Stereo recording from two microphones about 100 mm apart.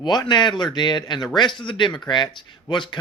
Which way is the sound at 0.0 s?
45° left (ahead or behind).